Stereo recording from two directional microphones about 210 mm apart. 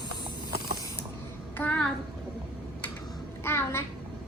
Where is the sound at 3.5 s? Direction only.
10° left (ahead or behind).